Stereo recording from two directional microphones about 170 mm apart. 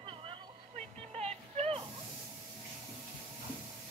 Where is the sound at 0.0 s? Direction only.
30° right (ahead or behind).